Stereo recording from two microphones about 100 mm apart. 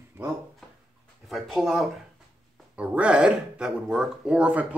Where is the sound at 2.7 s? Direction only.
10° right (ahead or behind).